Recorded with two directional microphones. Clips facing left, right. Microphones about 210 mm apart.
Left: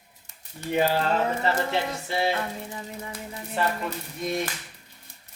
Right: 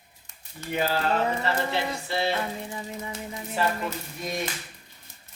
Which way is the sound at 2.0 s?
15° left (ahead or behind).